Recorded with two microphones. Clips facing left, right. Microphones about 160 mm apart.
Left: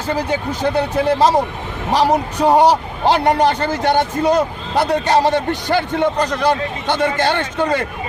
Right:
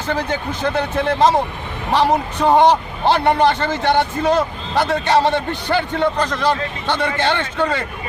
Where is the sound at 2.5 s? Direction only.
10° left (ahead or behind).